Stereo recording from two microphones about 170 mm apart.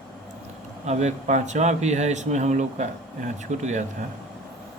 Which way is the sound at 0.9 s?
40° right (ahead or behind).